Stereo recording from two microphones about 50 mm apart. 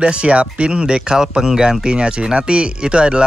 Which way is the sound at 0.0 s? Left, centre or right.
Right.